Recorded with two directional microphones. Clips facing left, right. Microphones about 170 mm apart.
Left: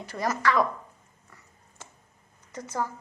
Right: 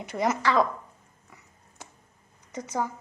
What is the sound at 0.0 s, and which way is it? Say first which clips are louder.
Speech: right 1 dB; 20° right (ahead or behind).